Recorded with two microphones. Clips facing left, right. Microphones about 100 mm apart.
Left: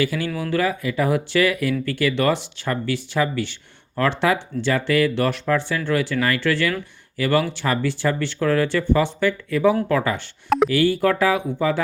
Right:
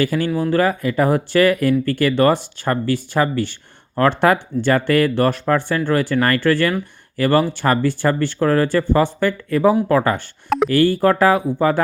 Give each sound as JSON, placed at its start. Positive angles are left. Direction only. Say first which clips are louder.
{"t": 0.0, "sound": "speech", "louder": "right 5 dB", "side_deg": -45}